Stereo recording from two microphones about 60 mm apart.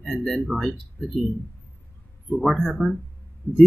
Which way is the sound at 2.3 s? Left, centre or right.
Centre.